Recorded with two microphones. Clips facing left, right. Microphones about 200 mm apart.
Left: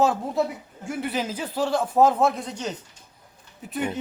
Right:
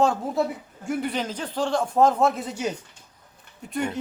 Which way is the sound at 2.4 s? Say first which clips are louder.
Right 3 dB; 5° right (ahead or behind).